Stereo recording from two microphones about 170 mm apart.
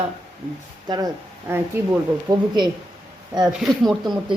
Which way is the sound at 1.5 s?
15° right (ahead or behind).